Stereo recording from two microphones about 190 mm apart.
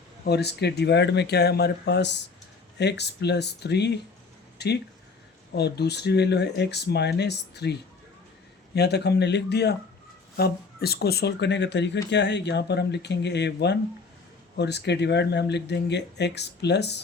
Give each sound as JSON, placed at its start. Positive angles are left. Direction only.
{"t": 0.3, "sound": "speech", "side_deg": 60}